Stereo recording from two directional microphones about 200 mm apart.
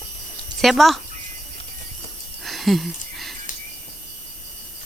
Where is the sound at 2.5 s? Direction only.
Centre (ahead or behind).